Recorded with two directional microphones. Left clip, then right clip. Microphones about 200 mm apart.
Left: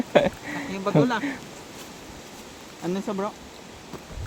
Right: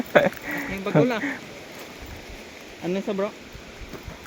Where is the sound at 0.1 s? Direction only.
20° left (ahead or behind).